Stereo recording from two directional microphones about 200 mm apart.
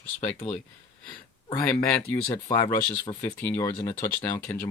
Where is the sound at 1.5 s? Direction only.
15° left (ahead or behind).